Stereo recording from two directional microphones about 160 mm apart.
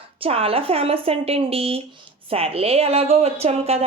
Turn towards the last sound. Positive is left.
turn(degrees=-40)  # may be behind; listen again after turning